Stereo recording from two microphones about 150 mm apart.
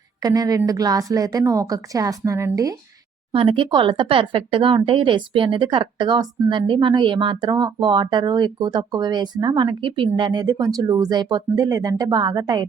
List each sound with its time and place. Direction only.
0.2 s speech: 25° right (ahead or behind)
3.3 s speech: 35° right (ahead or behind)